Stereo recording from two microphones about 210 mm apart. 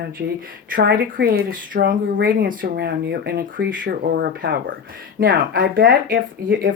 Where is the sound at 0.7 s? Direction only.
45° right (ahead or behind).